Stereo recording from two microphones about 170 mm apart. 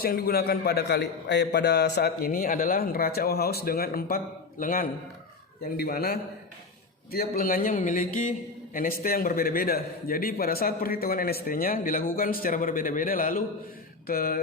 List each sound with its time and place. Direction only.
0.0 s a man's voice: 60° left (ahead or behind)